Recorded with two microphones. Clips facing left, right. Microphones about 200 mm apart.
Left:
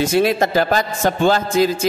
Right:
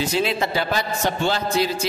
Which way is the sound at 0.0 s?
50° left (ahead or behind).